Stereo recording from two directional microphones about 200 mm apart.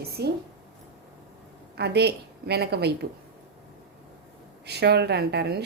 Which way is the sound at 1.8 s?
55° right (ahead or behind).